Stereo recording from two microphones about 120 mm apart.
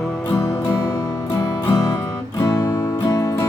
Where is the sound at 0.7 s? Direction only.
25° left (ahead or behind).